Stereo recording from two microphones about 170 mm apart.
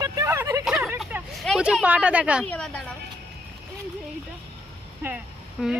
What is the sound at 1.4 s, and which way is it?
Speech, centre (ahead or behind).